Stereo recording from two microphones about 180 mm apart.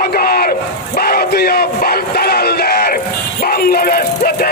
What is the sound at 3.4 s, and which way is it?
Music, 60° left (ahead or behind).